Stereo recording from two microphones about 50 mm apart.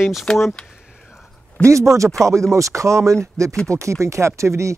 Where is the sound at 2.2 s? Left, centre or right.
Right.